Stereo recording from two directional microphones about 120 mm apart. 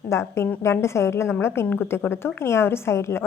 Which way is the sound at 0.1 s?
25° left (ahead or behind).